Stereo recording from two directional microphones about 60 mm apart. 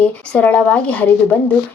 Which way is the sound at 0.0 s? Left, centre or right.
Centre.